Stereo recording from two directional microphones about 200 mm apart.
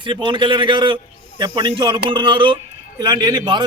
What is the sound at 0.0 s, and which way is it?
A man's voice, 25° right (ahead or behind).